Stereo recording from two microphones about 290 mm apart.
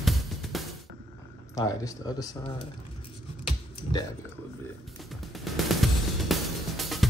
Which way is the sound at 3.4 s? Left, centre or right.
Centre.